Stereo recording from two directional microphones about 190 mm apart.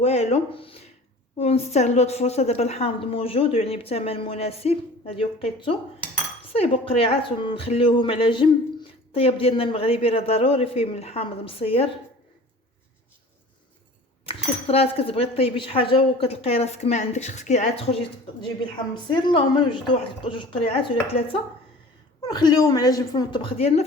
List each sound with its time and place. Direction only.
0.0 s a man's voice: 35° left (ahead or behind)
14.3 s a man's voice: 30° left (ahead or behind)
22.2 s a man's voice: 20° left (ahead or behind)